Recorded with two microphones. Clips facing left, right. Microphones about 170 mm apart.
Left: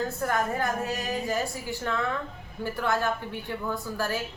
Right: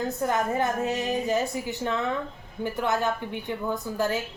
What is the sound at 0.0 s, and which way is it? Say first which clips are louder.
Speech: right 2 dB; 20° right (ahead or behind).